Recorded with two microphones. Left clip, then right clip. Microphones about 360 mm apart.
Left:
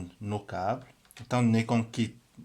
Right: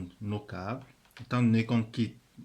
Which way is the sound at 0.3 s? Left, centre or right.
Centre.